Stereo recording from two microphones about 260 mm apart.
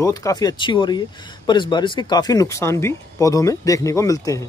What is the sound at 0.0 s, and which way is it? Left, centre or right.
Speech, centre.